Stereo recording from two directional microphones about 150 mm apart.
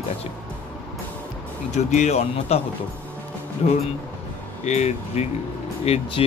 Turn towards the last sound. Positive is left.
turn(degrees=40)  # may be behind; listen again after turning